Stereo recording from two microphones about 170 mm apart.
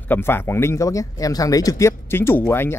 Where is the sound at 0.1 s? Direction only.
15° left (ahead or behind).